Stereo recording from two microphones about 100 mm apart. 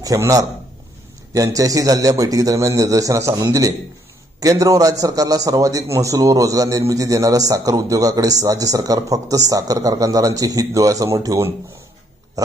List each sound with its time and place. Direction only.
0.0 s a man's voice: 35° right (ahead or behind)